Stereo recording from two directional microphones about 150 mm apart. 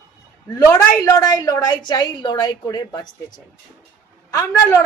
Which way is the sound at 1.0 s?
25° left (ahead or behind).